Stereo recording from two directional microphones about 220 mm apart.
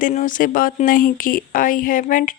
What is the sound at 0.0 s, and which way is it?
Speech, 35° left (ahead or behind).